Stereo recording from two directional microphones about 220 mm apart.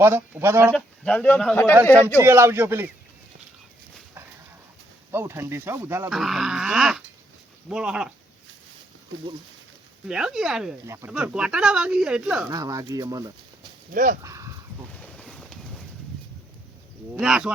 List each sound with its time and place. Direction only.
0.0 s speech: 10° right (ahead or behind)
0.7 s speech: 5° left (ahead or behind)
2.2 s speech: 10° right (ahead or behind)
5.1 s speech: 10° right (ahead or behind)
6.1 s speech: centre (ahead or behind)
10.1 s speech: 5° right (ahead or behind)
12.5 s speech: 15° right (ahead or behind)
13.9 s speech: 35° right (ahead or behind)
14.2 s a sound: 15° right (ahead or behind)
15.0 s boat: centre (ahead or behind)
17.2 s speech: centre (ahead or behind)